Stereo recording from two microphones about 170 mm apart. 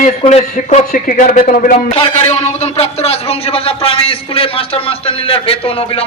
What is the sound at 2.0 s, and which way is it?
A man's voice, 40° left (ahead or behind).